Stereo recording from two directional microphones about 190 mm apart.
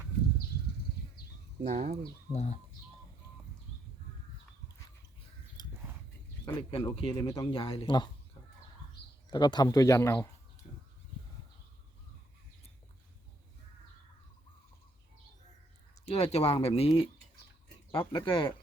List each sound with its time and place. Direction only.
1.6 s speech: 45° right (ahead or behind)
2.3 s speech: 35° left (ahead or behind)
6.4 s speech: 25° left (ahead or behind)
9.3 s speech: 20° left (ahead or behind)
16.0 s speech: 30° left (ahead or behind)
18.1 s speech: 25° left (ahead or behind)